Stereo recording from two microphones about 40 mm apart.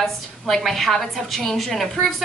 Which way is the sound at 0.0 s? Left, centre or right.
Centre.